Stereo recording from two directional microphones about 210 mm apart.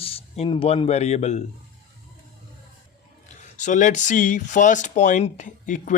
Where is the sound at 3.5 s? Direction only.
35° left (ahead or behind).